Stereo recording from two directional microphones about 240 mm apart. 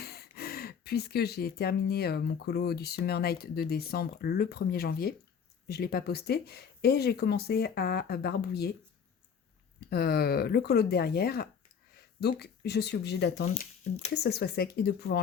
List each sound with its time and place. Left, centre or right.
0.0 s speech: left
9.9 s speech: left
13.5 s speech: left
14.1 s speech: left